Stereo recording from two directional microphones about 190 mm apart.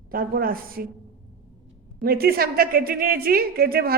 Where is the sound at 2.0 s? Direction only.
55° right (ahead or behind).